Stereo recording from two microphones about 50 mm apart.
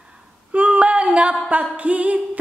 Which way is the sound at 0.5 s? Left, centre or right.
Right.